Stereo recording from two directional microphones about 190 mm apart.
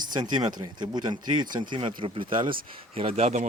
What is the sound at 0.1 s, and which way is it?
Speech, 20° right (ahead or behind).